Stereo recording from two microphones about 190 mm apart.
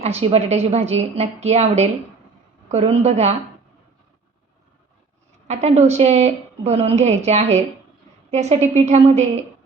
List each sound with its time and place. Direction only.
0.0 s a woman's voice: 35° right (ahead or behind)
5.5 s a woman's voice: 35° right (ahead or behind)